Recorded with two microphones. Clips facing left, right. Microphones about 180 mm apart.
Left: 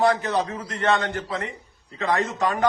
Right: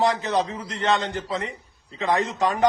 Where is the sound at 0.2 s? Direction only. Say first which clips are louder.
Right 1 dB; 15° right (ahead or behind).